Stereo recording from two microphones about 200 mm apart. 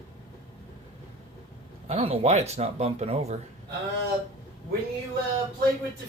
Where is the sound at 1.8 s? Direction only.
30° right (ahead or behind).